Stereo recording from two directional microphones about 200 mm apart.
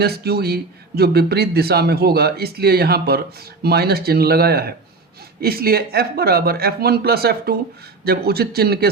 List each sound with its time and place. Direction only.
0.0 s speech: 50° right (ahead or behind)